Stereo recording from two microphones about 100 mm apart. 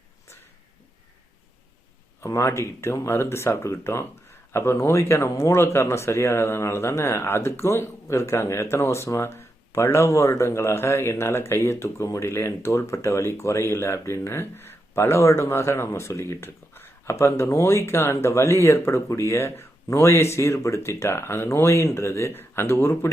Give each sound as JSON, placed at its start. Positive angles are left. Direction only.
{"t": 2.2, "sound": "speech", "side_deg": 30}